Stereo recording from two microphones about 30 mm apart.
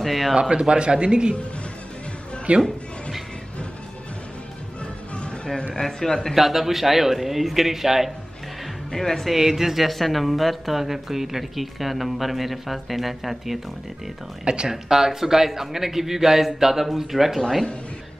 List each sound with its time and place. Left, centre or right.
0.0 s speech: centre
0.4 s a man's voice: right
2.5 s speech: right
5.8 s speech: centre
6.3 s a man's voice: centre
8.9 s speech: centre
9.3 s a man's voice: centre
9.8 s speech: centre
14.4 s a man's voice: right
14.7 s a man's voice: centre